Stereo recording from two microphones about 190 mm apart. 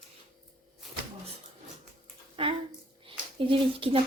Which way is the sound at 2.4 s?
30° right (ahead or behind).